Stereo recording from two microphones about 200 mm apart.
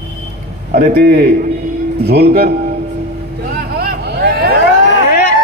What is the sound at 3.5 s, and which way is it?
Vehicle, 50° right (ahead or behind).